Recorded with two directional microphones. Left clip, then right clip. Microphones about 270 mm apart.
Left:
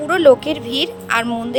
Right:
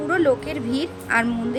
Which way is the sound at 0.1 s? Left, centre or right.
Left.